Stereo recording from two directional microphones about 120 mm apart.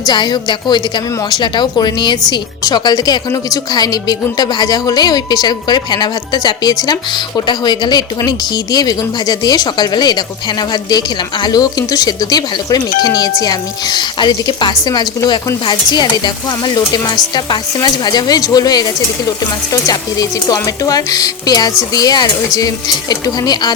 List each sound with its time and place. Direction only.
0.0 s speech: 35° left (ahead or behind)